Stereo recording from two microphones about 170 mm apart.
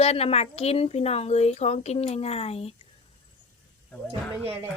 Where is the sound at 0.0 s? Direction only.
35° left (ahead or behind).